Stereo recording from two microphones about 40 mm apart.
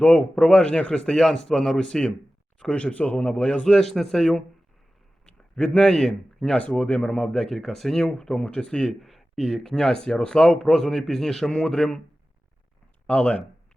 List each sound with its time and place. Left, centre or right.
0.0 s a man's voice: left; by 1.8 s centre
1.8 s a man's voice: left
3.6 s a man's voice: centre
5.2 s a sound: left
5.9 s a man's voice: centre
6.6 s a man's voice: left
7.2 s a man's voice: centre
9.0 s speech: centre
9.8 s a man's voice: centre
13.1 s a man's voice: left